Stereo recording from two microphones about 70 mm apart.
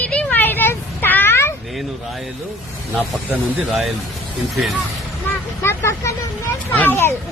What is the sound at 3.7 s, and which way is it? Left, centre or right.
Speech, centre.